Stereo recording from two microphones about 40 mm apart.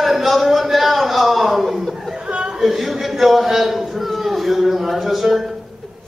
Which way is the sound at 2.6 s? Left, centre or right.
Centre.